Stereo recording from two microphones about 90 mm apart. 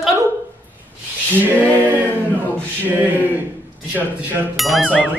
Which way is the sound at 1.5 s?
20° right (ahead or behind).